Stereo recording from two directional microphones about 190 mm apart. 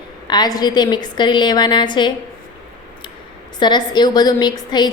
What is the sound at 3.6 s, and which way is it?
A woman's voice, 25° left (ahead or behind).